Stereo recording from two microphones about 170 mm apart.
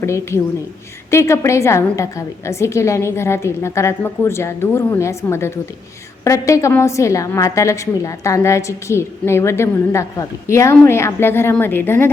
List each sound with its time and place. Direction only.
0.0 s a woman's voice: 15° left (ahead or behind)